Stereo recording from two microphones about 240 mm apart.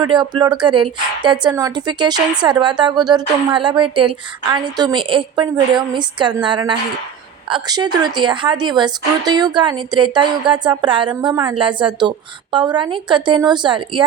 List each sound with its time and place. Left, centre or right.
0.0 s a woman's voice: centre